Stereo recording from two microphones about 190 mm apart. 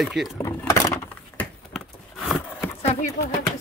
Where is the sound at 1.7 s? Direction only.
Centre (ahead or behind).